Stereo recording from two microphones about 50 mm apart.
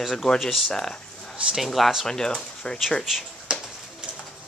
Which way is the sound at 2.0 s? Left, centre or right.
Centre.